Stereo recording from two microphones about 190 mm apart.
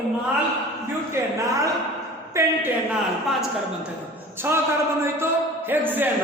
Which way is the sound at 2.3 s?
15° right (ahead or behind).